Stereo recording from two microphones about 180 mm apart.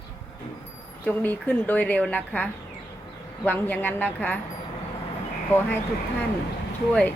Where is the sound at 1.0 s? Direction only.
10° left (ahead or behind).